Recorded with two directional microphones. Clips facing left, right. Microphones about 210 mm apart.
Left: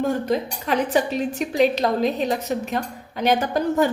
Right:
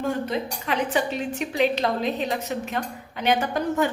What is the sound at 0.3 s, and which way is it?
A woman's voice, 40° left (ahead or behind).